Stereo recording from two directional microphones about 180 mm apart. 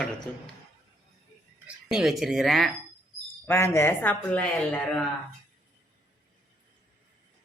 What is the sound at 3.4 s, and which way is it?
A man's voice, 15° left (ahead or behind).